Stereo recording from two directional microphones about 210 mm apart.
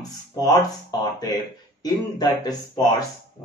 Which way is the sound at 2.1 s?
20° left (ahead or behind).